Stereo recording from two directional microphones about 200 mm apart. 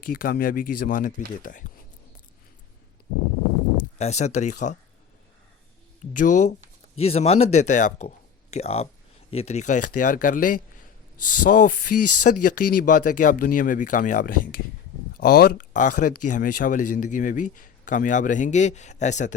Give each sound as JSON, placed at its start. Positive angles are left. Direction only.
{"t": 0.0, "sound": "speech", "side_deg": 45}
{"t": 3.9, "sound": "speech", "side_deg": 35}
{"t": 6.1, "sound": "speech", "side_deg": 40}